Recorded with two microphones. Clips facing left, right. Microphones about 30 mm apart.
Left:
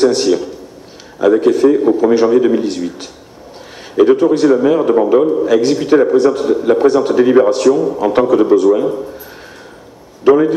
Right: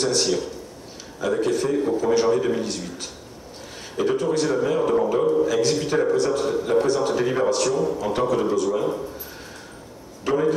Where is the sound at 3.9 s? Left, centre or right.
Left.